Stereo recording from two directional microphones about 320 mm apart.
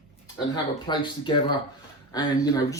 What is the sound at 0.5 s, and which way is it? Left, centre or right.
Speech, centre.